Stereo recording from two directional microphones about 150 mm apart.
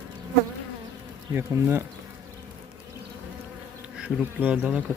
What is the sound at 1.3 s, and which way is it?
Speech, 15° right (ahead or behind).